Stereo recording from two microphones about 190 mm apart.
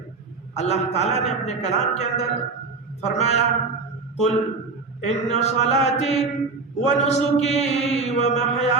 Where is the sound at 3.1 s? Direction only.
35° left (ahead or behind).